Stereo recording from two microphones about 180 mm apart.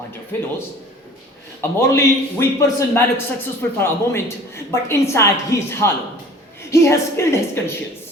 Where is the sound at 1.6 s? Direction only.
10° left (ahead or behind).